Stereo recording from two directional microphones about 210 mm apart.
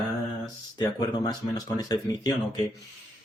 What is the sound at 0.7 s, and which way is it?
A man's voice, 20° left (ahead or behind).